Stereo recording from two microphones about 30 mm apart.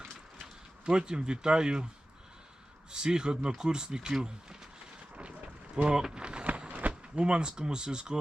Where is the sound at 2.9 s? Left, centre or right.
Right.